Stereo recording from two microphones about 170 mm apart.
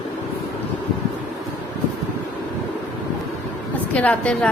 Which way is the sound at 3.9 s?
5° left (ahead or behind).